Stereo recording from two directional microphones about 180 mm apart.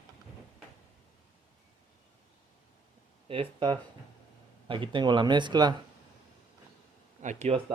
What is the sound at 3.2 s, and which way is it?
Speech, 30° right (ahead or behind).